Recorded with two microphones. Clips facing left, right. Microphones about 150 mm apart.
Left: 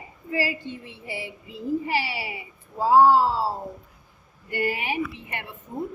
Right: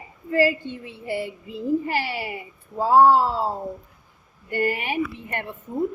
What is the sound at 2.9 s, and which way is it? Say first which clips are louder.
Speech: right 1 dB; 55° right (ahead or behind).